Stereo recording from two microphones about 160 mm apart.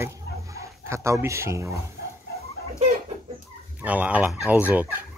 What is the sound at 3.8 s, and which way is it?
Fowl, 10° right (ahead or behind).